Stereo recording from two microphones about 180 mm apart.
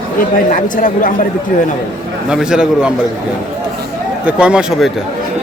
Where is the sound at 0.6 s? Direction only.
45° left (ahead or behind).